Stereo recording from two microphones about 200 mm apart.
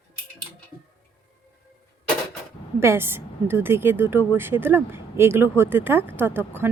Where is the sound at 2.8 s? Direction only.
10° right (ahead or behind).